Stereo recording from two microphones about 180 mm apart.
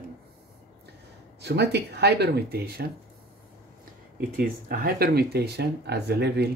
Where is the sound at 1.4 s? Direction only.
70° right (ahead or behind).